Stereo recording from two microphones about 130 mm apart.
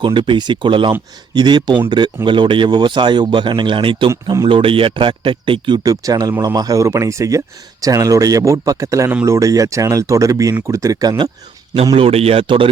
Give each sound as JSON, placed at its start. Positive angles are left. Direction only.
{"t": 0.0, "sound": "speech", "side_deg": -40}
{"t": 11.9, "sound": "a man's voice", "side_deg": -50}